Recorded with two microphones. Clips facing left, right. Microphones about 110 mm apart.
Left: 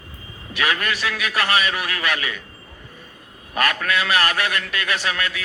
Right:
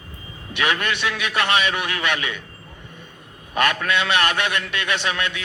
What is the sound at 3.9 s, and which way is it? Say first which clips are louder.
A man's voice: even; 25° right (ahead or behind).